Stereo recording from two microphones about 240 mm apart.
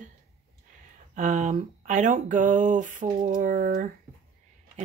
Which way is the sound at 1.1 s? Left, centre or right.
Right.